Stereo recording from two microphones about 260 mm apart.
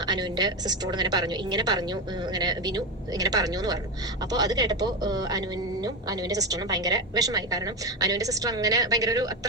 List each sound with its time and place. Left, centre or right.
0.0 s a woman's voice: centre